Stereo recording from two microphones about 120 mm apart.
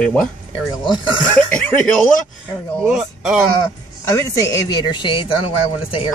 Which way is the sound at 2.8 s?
5° right (ahead or behind).